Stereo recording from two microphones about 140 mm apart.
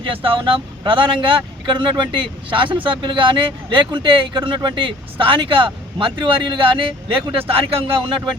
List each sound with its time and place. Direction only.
0.1 s speech: 40° right (ahead or behind)